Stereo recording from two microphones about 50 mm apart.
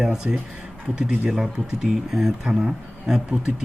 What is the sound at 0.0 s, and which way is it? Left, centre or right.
Speech, centre.